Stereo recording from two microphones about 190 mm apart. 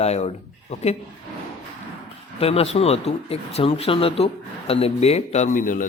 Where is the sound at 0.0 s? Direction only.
35° left (ahead or behind).